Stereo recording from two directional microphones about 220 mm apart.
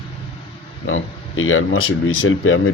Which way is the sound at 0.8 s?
65° left (ahead or behind).